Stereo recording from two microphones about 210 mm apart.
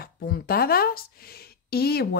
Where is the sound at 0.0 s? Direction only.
45° left (ahead or behind).